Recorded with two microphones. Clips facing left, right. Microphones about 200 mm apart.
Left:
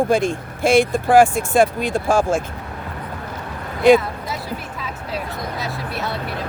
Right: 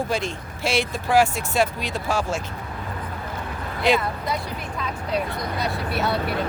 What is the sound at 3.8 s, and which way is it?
Speech, 50° left (ahead or behind).